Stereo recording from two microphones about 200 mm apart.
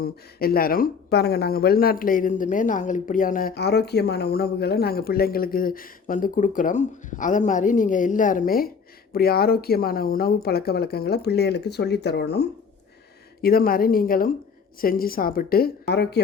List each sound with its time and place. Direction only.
0.0 s speech: 50° left (ahead or behind)